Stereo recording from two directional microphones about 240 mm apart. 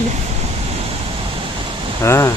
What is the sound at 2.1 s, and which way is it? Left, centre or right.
Speech, centre.